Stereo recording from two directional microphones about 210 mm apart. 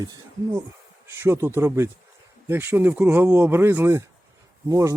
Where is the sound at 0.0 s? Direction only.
20° right (ahead or behind).